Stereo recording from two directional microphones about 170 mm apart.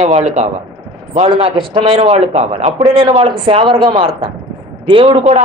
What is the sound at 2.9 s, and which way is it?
Speech, 30° right (ahead or behind).